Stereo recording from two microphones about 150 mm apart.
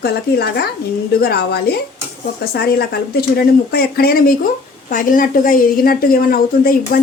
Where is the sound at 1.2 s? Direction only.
90° left.